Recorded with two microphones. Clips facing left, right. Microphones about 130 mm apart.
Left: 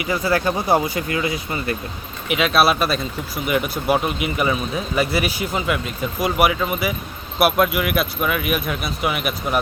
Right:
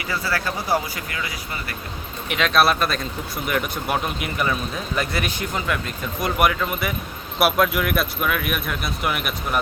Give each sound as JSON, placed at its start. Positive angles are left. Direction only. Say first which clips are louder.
{"t": 0.0, "sound": "speech", "louder": "left 6 dB", "side_deg": 20}
{"t": 2.3, "sound": "speech", "louder": "left 2 dB", "side_deg": 5}